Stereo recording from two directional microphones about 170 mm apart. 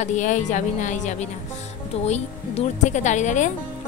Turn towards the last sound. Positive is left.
turn(degrees=45)  # may be behind; listen again after turning